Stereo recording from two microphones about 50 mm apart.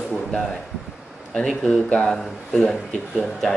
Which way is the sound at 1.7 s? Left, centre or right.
Centre.